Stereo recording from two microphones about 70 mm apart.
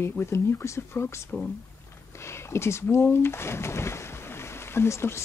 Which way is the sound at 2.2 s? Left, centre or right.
Left.